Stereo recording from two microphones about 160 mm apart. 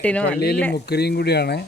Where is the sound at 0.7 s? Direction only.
90° left.